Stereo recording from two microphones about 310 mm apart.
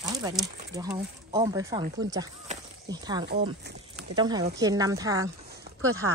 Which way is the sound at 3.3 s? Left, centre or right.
Right.